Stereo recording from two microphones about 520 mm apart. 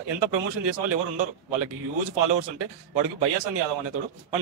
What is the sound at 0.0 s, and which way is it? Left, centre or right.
A man's voice, right.